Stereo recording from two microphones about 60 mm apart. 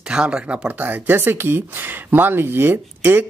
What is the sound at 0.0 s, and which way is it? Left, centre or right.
Speech, centre.